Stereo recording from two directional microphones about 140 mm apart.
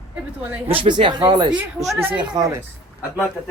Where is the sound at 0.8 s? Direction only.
35° right (ahead or behind).